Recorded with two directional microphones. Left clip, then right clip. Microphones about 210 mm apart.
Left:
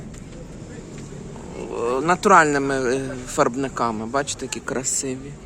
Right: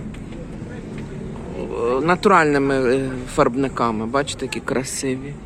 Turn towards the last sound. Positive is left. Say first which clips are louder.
# right 3 dB
turn(degrees=5)  # may be behind; listen again after turning